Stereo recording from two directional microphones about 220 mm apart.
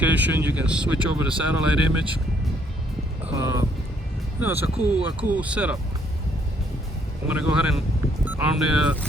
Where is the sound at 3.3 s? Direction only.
15° right (ahead or behind).